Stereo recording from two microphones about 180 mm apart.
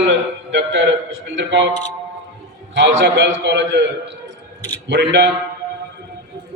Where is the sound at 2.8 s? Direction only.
80° right.